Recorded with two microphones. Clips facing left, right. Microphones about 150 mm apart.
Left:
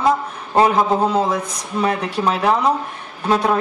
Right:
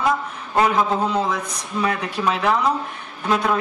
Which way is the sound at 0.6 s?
25° left (ahead or behind).